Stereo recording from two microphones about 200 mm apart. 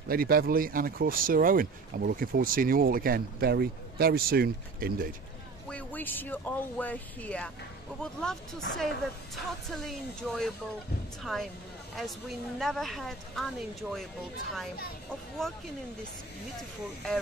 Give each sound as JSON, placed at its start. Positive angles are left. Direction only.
{"t": 0.1, "sound": "speech", "side_deg": -50}
{"t": 5.7, "sound": "speech", "side_deg": 10}
{"t": 11.9, "sound": "speech", "side_deg": 0}
{"t": 15.4, "sound": "speech", "side_deg": 0}